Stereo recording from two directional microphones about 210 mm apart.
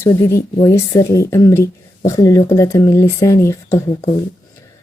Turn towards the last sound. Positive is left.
turn(degrees=15)  # may be behind; listen again after turning